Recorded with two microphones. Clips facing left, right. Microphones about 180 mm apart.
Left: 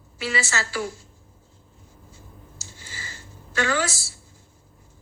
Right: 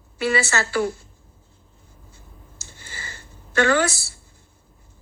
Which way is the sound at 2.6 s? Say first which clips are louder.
Right 2 dB; 60° right (ahead or behind).